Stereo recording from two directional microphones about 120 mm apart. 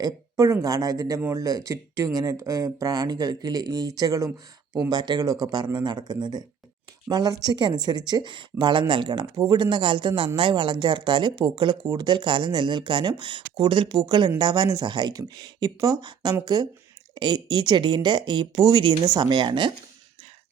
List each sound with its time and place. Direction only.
0.0 s speech: 30° right (ahead or behind)